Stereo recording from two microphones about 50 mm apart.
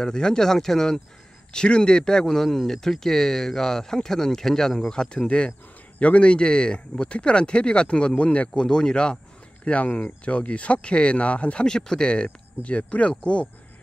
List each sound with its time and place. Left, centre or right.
0.0 s speech: centre